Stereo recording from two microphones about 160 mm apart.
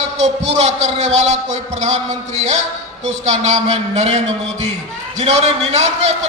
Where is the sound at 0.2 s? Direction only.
45° right (ahead or behind).